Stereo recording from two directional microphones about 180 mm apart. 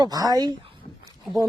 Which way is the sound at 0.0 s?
20° right (ahead or behind).